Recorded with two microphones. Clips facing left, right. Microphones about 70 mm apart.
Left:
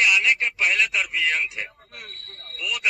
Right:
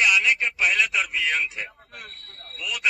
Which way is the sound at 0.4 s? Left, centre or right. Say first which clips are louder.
Even; centre.